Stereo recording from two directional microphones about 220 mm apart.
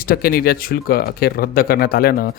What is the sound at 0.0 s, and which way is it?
Speech, 40° left (ahead or behind).